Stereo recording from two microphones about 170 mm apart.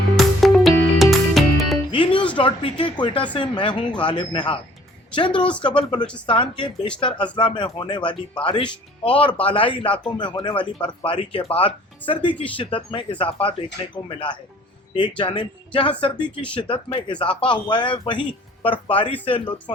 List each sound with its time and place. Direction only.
0.2 s music: centre (ahead or behind)
1.9 s music: 30° left (ahead or behind)
2.4 s speech: 30° left (ahead or behind)
5.4 s speech: 5° left (ahead or behind)
6.2 s speech: 30° left (ahead or behind)
14.9 s speech: 30° left (ahead or behind)